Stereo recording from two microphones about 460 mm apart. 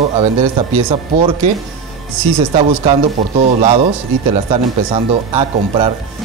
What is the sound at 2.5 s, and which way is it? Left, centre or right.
Speech, centre.